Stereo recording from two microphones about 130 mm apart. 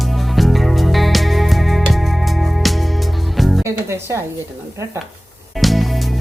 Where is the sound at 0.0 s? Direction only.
Centre (ahead or behind).